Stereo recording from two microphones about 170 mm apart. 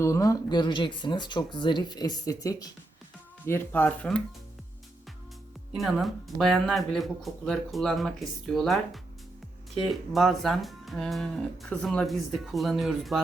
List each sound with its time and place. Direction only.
0.0 s speech: 20° left (ahead or behind)
5.7 s speech: centre (ahead or behind)